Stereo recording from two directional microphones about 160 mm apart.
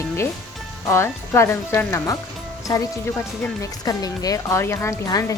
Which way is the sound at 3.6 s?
25° left (ahead or behind).